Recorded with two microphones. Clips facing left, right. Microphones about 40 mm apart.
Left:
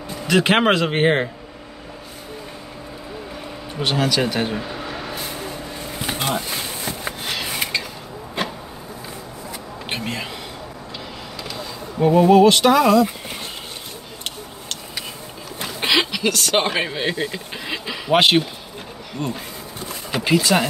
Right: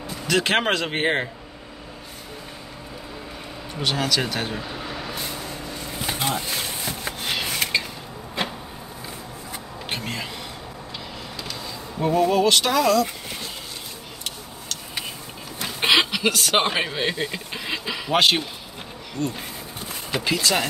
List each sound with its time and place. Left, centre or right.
0.3 s speech: centre
3.8 s speech: centre
5.9 s a sound: centre
9.8 s a sound: centre
12.0 s speech: centre
15.8 s speech: centre
18.1 s speech: left